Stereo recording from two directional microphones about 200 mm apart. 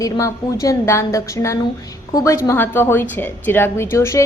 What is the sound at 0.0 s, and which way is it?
A woman's voice, 15° left (ahead or behind).